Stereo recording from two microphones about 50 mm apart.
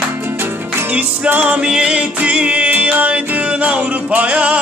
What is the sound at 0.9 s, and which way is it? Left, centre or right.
Music, right.